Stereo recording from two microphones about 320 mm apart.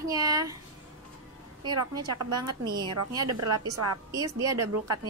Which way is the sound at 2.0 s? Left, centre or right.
Right.